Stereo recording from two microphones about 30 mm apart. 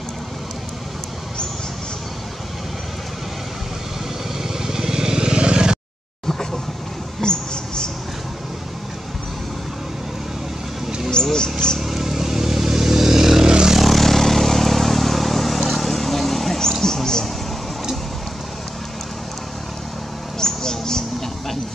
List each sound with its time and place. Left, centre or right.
4.4 s vehicle: centre; by 5.8 s right
7.2 s mouse: left
11.2 s a sound: left
11.8 s vehicle: centre
13.5 s vehicle: right
13.7 s vehicle: centre
16.8 s mouse: centre
20.3 s a sound: centre